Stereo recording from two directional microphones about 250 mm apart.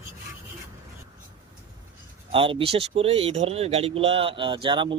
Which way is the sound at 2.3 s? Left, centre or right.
Right.